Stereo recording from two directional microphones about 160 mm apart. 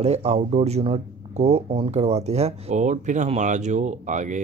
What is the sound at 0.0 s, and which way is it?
Speech, 40° right (ahead or behind).